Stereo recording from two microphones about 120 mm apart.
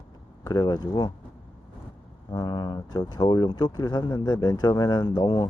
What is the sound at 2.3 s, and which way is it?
Speech, 35° left (ahead or behind).